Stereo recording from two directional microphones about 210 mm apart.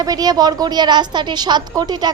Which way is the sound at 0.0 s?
20° right (ahead or behind).